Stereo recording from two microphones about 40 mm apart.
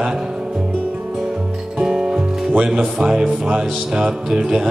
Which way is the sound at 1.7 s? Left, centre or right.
Centre.